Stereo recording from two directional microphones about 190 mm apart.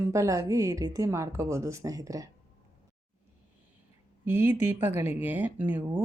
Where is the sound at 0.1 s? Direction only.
15° right (ahead or behind).